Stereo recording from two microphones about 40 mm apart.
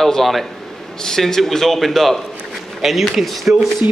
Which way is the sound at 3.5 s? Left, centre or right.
Right.